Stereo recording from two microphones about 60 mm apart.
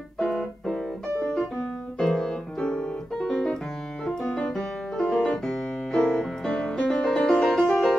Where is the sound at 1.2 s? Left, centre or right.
Centre.